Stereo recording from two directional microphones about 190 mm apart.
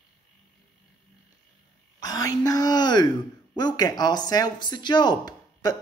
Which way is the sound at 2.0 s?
20° left (ahead or behind).